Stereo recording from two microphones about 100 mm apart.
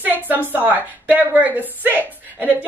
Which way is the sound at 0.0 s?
15° right (ahead or behind).